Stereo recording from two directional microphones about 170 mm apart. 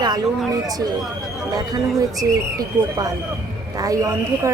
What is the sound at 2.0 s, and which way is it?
A woman's voice, 20° right (ahead or behind).